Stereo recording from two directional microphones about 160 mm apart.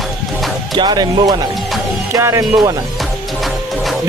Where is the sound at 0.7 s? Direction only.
25° right (ahead or behind).